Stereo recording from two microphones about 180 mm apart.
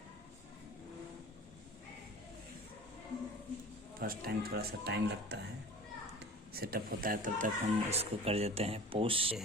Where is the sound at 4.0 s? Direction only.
55° right (ahead or behind).